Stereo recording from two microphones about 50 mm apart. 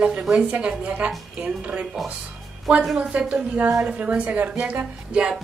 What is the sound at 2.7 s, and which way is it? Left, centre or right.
Speech, centre.